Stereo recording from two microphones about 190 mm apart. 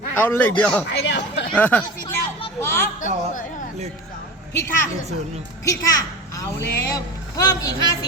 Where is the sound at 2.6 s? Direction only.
10° left (ahead or behind).